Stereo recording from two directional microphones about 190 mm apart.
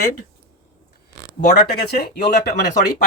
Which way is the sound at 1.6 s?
55° left (ahead or behind).